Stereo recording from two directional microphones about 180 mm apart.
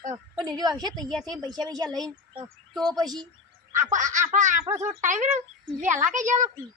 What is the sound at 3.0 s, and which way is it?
Speech, 20° right (ahead or behind).